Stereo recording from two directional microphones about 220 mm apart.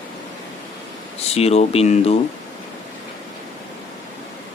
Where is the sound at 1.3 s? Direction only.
30° left (ahead or behind).